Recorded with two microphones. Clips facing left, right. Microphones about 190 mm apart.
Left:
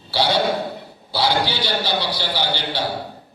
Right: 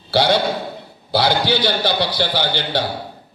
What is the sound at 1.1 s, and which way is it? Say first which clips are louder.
A man's voice: right 4 dB; 55° right (ahead or behind).